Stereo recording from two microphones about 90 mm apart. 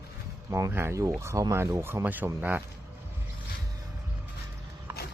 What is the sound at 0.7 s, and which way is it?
Speech, 30° right (ahead or behind).